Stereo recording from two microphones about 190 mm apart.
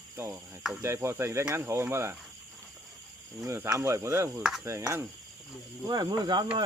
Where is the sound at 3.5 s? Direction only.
15° right (ahead or behind).